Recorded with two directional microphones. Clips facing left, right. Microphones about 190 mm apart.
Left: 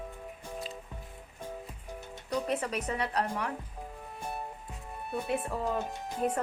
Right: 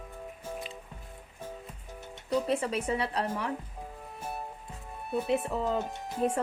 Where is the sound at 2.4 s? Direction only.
30° right (ahead or behind).